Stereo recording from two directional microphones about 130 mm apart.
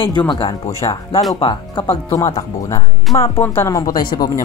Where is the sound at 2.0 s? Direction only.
25° left (ahead or behind).